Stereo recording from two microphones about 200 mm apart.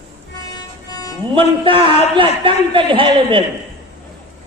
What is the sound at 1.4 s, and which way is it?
A man's voice, 25° right (ahead or behind).